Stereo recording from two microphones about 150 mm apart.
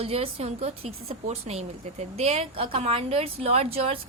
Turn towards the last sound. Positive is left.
turn(degrees=-40)  # may be behind; listen again after turning